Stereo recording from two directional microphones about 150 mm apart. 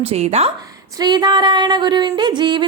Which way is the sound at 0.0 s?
45° right (ahead or behind).